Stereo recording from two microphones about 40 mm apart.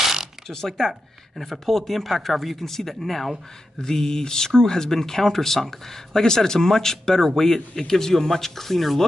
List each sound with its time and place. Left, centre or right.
0.5 s speech: centre